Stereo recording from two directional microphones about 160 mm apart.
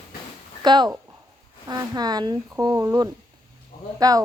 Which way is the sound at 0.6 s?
25° right (ahead or behind).